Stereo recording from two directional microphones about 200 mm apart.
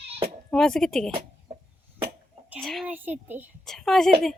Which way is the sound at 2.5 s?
Centre (ahead or behind).